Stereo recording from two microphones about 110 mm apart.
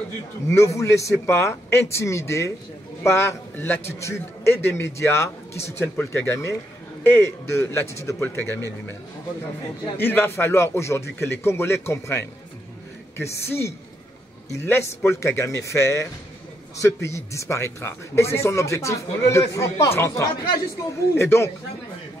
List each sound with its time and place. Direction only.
0.5 s a man's voice: 25° left (ahead or behind)
9.9 s a man's voice: 20° left (ahead or behind)